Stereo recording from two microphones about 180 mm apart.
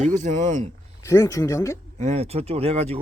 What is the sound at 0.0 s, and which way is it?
Speech, 45° right (ahead or behind).